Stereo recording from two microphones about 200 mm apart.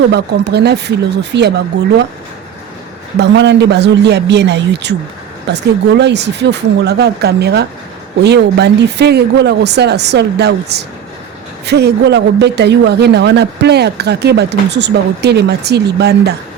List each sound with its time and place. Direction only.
0.1 s speech: 55° right (ahead or behind)
3.2 s speech: 60° right (ahead or behind)